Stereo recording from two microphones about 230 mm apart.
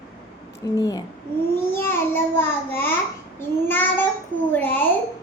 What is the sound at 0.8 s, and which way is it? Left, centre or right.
Speech, centre.